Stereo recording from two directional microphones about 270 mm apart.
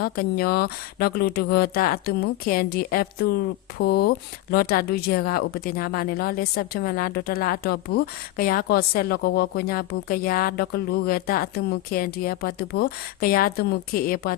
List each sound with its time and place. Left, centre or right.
0.0 s speech: left